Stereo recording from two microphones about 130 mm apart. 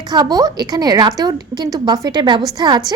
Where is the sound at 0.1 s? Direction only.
30° right (ahead or behind).